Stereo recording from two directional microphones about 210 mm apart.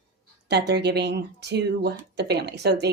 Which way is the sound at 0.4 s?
55° right (ahead or behind).